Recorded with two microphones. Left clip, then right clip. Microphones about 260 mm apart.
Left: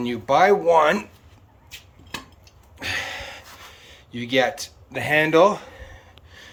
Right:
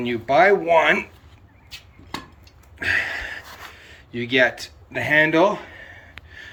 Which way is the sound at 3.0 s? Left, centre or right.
Centre.